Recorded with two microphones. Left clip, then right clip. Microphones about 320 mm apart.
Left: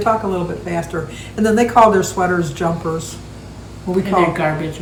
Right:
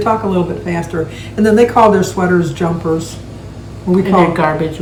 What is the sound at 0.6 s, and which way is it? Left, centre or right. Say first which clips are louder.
Speech: right 3 dB; centre.